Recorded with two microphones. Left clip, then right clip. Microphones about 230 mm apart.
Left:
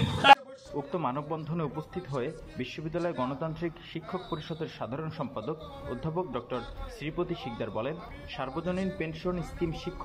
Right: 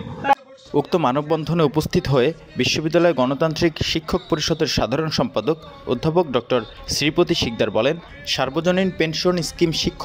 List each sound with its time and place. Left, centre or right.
0.7 s speech: right